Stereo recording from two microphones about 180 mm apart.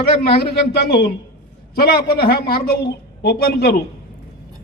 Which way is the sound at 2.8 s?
65° left (ahead or behind).